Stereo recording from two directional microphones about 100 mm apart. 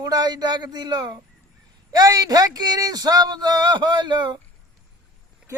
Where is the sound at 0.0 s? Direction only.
40° right (ahead or behind).